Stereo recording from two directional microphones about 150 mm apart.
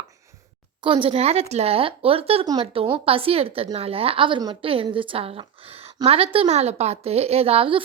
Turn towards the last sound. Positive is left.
turn(degrees=-40)  # may be behind; listen again after turning